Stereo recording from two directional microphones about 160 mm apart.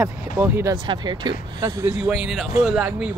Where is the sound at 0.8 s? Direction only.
30° right (ahead or behind).